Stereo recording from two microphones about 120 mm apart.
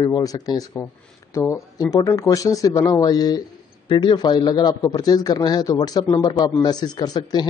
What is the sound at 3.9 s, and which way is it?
Speech, 45° left (ahead or behind).